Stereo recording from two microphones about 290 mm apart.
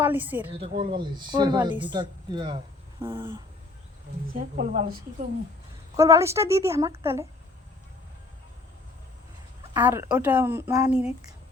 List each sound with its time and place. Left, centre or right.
0.0 s speech: centre
0.6 s speech: centre
4.4 s a woman's voice: right
6.0 s speech: centre
9.7 s speech: centre